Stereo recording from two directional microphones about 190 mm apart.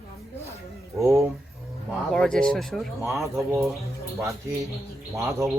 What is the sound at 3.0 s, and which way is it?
Speech, 15° right (ahead or behind).